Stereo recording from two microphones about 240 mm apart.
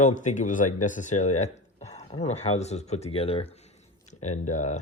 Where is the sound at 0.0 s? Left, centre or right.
Left.